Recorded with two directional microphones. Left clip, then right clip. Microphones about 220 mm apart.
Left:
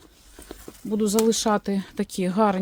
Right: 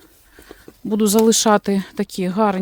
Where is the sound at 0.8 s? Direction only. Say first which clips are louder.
Right 6 dB; 40° right (ahead or behind); by 2.5 s 20° right (ahead or behind).